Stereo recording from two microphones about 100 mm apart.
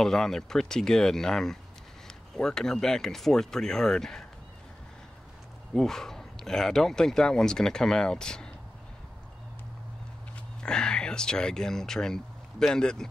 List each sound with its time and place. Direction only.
0.0 s speech: 5° left (ahead or behind)
5.7 s speech: 5° left (ahead or behind)
10.6 s speech: 10° left (ahead or behind)